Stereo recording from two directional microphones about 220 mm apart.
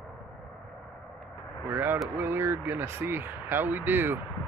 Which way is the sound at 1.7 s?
10° right (ahead or behind).